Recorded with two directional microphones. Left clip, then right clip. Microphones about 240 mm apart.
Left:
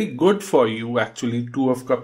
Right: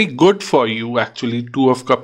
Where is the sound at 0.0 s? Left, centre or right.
Right.